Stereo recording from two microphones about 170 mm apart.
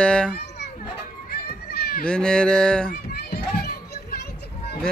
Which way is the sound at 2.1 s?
5° left (ahead or behind).